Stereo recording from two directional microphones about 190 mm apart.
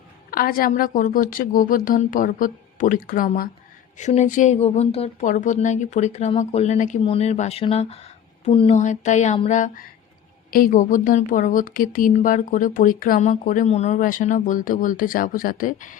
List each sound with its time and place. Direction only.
0.3 s a woman's voice: 50° left (ahead or behind)